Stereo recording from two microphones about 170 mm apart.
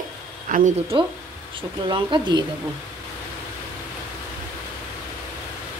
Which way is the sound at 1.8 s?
25° right (ahead or behind).